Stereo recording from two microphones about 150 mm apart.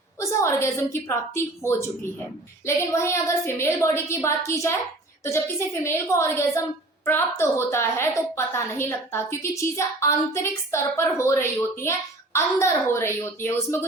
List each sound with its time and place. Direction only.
0.2 s a woman's voice: 20° left (ahead or behind)
2.6 s a woman's voice: 20° left (ahead or behind)